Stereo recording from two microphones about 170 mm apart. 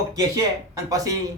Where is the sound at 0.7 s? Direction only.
20° right (ahead or behind).